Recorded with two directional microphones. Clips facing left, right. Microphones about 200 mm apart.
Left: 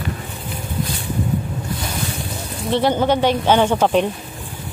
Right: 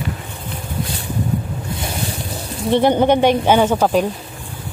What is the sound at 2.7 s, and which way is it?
Speech, 15° right (ahead or behind).